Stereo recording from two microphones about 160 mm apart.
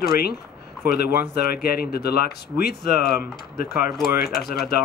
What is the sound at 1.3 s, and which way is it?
Speech, 80° left.